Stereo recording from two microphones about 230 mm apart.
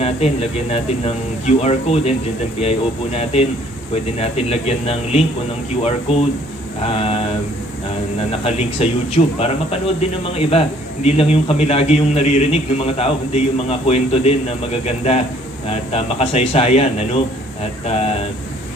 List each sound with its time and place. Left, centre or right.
0.0 s a man's voice: left
8.5 s a man's voice: left